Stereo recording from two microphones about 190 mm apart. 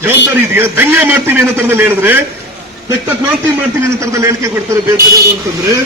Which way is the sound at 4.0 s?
15° right (ahead or behind).